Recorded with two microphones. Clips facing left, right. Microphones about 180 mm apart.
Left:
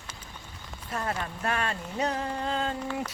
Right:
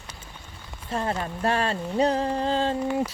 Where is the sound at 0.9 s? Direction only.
30° right (ahead or behind).